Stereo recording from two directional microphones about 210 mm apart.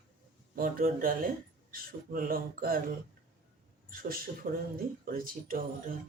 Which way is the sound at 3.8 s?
45° right (ahead or behind).